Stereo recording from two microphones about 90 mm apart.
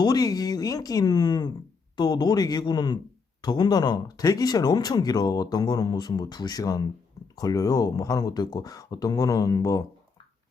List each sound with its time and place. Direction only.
0.0 s speech: 45° left (ahead or behind)